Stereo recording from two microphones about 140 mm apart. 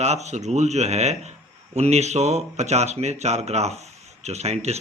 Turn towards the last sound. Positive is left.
turn(degrees=-50)  # may be behind; listen again after turning